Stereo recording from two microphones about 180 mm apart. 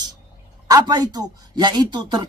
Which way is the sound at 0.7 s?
20° right (ahead or behind).